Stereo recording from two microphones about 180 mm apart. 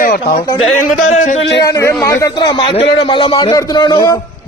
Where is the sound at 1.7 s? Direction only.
15° left (ahead or behind).